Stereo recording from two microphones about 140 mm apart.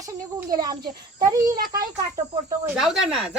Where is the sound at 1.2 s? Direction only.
25° right (ahead or behind).